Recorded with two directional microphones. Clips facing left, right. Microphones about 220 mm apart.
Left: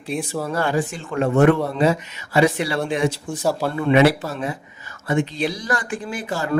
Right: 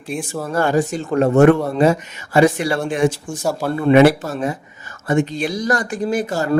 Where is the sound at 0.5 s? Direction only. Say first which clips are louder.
Right 6 dB; 45° right (ahead or behind).